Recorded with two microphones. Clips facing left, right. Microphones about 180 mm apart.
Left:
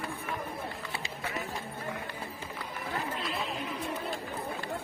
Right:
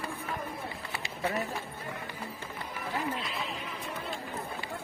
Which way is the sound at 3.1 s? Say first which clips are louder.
Left 2 dB; centre (ahead or behind).